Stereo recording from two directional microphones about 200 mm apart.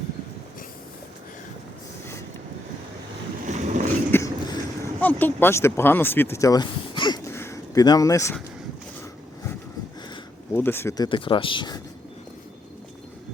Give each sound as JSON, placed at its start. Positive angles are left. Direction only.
{"t": 3.4, "sound": "vehicle", "side_deg": -35}
{"t": 4.1, "sound": "a sound", "side_deg": 15}
{"t": 4.9, "sound": "speech", "side_deg": 10}
{"t": 10.5, "sound": "speech", "side_deg": 10}